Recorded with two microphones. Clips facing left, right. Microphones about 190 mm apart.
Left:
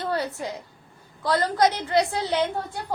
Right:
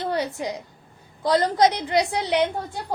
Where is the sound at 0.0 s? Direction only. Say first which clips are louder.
Right 2 dB; 20° right (ahead or behind).